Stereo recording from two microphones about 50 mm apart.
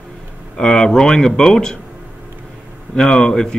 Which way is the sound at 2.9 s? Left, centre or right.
Centre.